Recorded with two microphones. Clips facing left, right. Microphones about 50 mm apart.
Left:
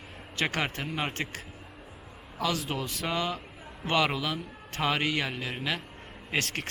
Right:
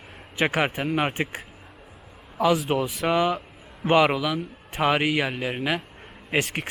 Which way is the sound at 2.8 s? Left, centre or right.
Centre.